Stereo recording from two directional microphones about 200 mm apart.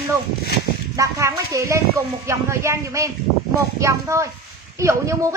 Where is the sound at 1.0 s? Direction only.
15° right (ahead or behind).